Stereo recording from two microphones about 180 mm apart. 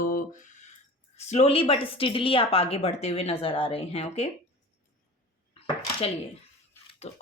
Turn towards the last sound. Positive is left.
turn(degrees=40)  # may be behind; listen again after turning